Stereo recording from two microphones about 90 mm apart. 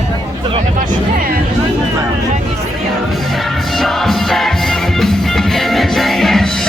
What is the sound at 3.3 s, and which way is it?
Music, centre (ahead or behind).